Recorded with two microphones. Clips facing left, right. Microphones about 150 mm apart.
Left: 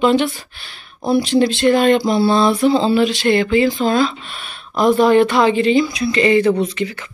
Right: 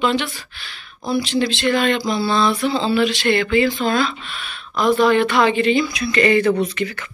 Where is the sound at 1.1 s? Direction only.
50° left (ahead or behind).